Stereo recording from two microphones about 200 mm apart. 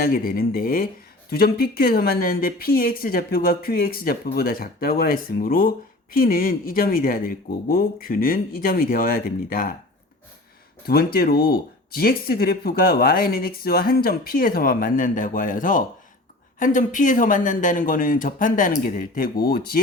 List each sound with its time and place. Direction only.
0.0 s a woman's voice: 45° left (ahead or behind)
10.8 s a woman's voice: 50° left (ahead or behind)